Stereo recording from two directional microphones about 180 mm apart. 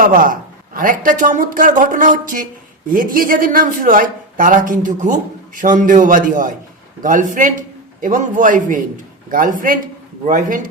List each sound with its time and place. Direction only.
0.0 s speech: 50° right (ahead or behind)